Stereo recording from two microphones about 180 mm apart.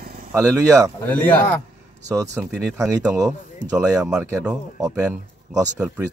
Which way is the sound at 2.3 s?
10° right (ahead or behind).